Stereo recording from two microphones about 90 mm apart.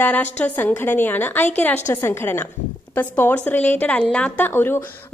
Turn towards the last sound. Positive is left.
turn(degrees=25)  # may be behind; listen again after turning